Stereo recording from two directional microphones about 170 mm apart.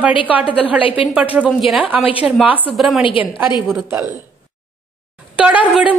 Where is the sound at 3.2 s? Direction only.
10° right (ahead or behind).